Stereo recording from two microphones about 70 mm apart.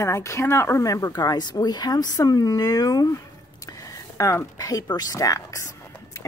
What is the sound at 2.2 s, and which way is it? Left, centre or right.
Speech, left.